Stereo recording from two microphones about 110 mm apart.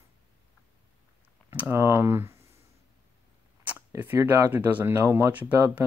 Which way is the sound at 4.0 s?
20° right (ahead or behind).